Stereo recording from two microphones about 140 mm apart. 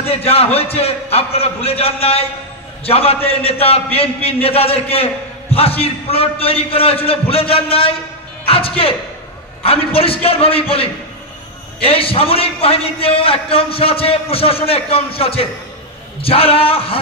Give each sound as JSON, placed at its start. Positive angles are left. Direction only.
{"t": 0.2, "sound": "a man's voice", "side_deg": 45}